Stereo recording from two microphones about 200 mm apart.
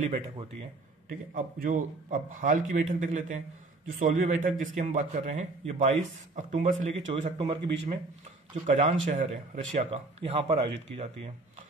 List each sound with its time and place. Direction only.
0.0 s a man's voice: 35° right (ahead or behind)